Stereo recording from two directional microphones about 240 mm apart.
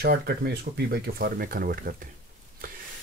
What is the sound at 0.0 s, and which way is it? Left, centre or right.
Speech, right.